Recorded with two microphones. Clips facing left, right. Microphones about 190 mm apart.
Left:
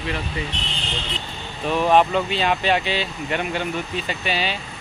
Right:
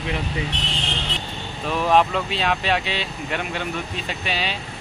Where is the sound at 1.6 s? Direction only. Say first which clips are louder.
Left 2 dB; centre (ahead or behind).